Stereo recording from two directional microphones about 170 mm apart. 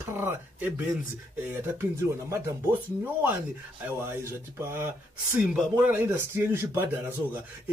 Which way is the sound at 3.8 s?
15° right (ahead or behind).